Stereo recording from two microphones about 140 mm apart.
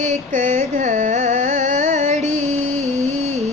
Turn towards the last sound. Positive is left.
turn(degrees=-50)  # may be behind; listen again after turning